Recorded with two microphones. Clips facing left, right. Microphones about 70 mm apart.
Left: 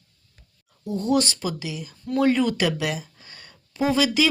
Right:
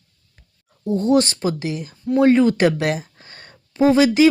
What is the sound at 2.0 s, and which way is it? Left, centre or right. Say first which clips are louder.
Speech: right 6 dB; right.